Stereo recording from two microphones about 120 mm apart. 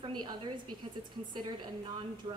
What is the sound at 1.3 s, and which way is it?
Speech, 40° right (ahead or behind).